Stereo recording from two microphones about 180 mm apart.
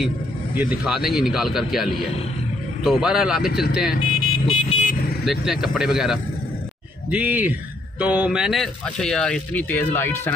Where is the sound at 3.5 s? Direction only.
60° left (ahead or behind).